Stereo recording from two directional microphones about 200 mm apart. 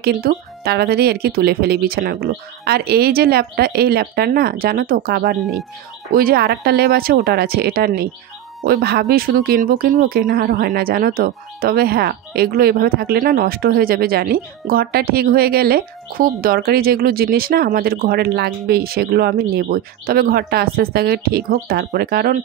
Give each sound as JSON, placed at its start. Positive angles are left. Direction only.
{"t": 0.0, "sound": "speech", "side_deg": -50}